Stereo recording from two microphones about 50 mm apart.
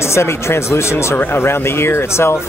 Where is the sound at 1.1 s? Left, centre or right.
Left.